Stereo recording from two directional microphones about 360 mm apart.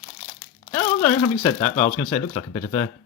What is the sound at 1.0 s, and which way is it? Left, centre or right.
Speech, centre.